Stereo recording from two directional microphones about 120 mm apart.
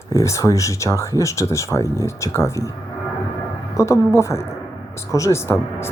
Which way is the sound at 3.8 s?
25° left (ahead or behind).